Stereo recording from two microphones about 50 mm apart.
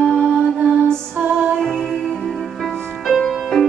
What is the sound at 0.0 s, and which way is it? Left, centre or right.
Music, centre.